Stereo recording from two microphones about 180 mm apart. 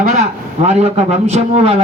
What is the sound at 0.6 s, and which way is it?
Speech, 35° right (ahead or behind).